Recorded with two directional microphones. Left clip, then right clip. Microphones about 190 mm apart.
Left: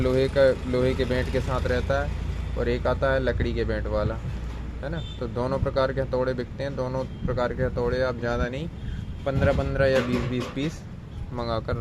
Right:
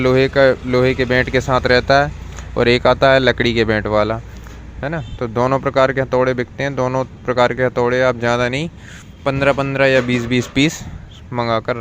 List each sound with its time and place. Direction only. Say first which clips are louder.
0.0 s speech: right 8 dB; 30° right (ahead or behind)
11.3 s speech: right 11 dB; 25° right (ahead or behind)